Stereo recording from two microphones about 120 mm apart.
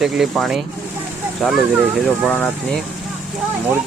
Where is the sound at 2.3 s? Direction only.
15° left (ahead or behind).